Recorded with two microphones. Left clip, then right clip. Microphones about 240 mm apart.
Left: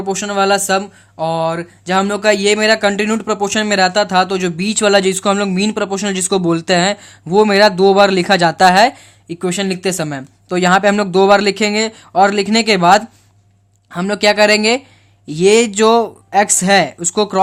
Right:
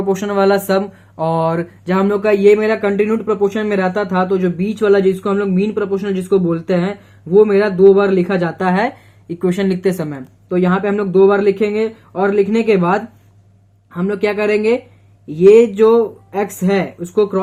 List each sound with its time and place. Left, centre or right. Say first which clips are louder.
0.0 s speech: right 1 dB; centre
1.9 s a man's voice: left 1 dB; left
9.3 s speech: right 1 dB; left
10.1 s a man's voice: left 1 dB; left